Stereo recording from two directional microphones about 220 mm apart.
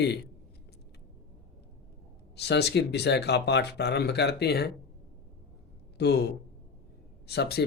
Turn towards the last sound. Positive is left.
turn(degrees=45)  # may be behind; listen again after turning